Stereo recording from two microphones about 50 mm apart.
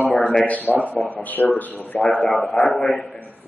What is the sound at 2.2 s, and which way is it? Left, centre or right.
Speech, centre.